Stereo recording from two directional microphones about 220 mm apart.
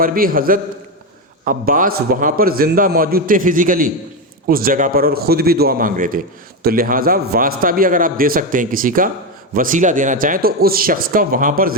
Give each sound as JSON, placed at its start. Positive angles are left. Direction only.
{"t": 0.0, "sound": "a man's voice", "side_deg": -40}